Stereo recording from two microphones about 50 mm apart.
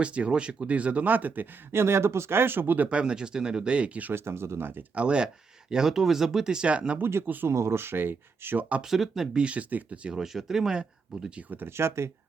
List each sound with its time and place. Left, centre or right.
0.0 s speech: right
1.7 s speech: right
2.9 s speech: centre
4.1 s speech: right
4.9 s speech: right
5.7 s speech: centre
7.0 s speech: right
7.4 s speech: right
8.8 s speech: centre
9.4 s speech: right
10.2 s speech: centre
11.8 s speech: right